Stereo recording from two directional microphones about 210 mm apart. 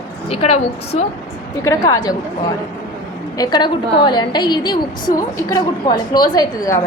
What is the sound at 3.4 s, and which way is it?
A woman's voice, 20° left (ahead or behind).